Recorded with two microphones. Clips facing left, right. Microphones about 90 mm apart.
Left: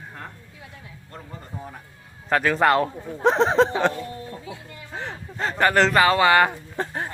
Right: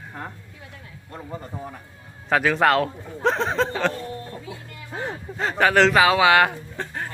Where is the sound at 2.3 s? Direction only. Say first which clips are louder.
Even; centre (ahead or behind).